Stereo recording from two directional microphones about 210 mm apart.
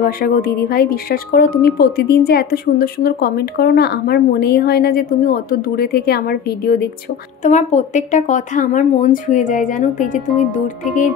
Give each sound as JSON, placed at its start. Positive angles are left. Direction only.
{"t": 0.0, "sound": "a woman's voice", "side_deg": 45}
{"t": 7.4, "sound": "speech", "side_deg": 35}